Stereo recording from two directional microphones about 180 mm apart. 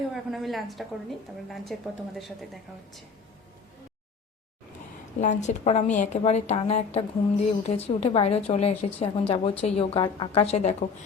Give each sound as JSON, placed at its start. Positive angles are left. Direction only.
{"t": 0.1, "sound": "a woman's voice", "side_deg": 0}
{"t": 5.2, "sound": "a woman's voice", "side_deg": 40}